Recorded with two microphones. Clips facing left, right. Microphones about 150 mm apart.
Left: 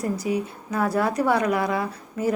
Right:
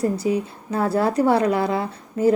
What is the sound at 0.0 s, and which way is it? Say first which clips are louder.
A woman's voice: right 4 dB; 30° right (ahead or behind).